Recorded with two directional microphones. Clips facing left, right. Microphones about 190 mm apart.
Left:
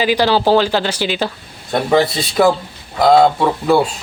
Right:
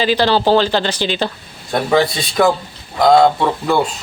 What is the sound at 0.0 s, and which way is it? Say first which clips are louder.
Speech: even; 10° left (ahead or behind).